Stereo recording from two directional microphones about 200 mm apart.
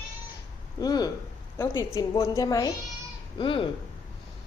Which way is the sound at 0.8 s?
20° left (ahead or behind).